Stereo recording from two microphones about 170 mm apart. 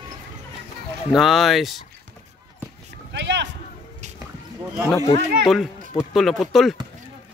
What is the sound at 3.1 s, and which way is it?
Speech, 90° right.